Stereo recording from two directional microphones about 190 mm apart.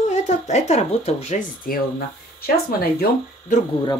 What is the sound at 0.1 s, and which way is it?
Speech, 35° left (ahead or behind).